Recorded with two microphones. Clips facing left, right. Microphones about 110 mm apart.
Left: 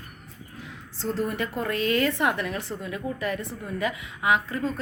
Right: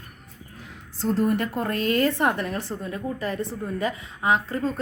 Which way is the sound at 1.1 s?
45° right (ahead or behind).